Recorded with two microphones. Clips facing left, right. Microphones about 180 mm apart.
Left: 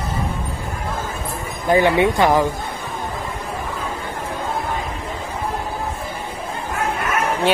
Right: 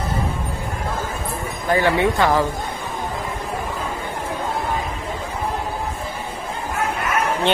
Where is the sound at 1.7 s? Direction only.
15° left (ahead or behind).